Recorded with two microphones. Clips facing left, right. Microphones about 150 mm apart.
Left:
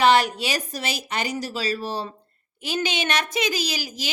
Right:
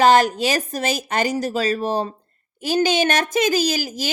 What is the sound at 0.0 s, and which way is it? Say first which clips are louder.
A woman's voice: right 4 dB; 45° right (ahead or behind).